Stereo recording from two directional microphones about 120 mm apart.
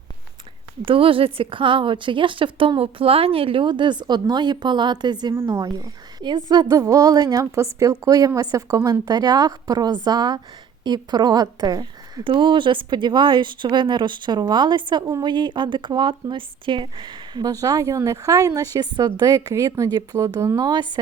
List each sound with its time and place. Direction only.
0.9 s a woman's voice: 50° right (ahead or behind); by 12.2 s 30° right (ahead or behind)
12.2 s speech: 45° right (ahead or behind); by 20.7 s 30° right (ahead or behind)
20.7 s speech: 40° right (ahead or behind)